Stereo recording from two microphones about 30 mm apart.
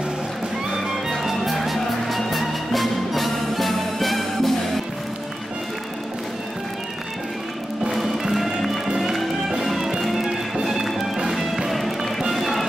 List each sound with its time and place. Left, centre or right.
1.2 s music: centre
7.9 s music: centre
9.8 s music: centre